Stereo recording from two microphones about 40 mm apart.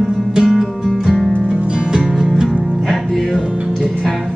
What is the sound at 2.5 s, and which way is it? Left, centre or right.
Music, centre.